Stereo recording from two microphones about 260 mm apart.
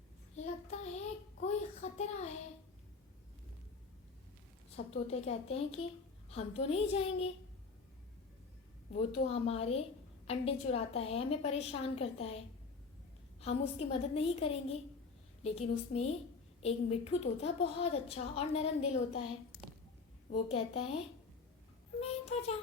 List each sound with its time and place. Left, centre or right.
0.3 s child singing: left
5.0 s a woman's voice: left
9.0 s a woman's voice: left
20.5 s a woman's voice: left